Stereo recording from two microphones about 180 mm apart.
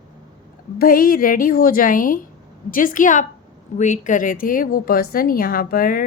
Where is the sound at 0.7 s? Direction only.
55° left (ahead or behind).